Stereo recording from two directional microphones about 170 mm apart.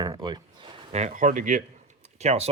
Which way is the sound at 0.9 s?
45° right (ahead or behind).